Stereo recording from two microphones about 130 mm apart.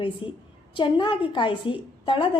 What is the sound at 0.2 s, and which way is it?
A woman's voice, 40° left (ahead or behind).